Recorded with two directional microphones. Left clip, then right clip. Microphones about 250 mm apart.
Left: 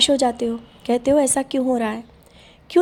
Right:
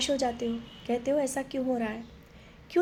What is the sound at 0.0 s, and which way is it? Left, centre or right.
A woman's voice, left.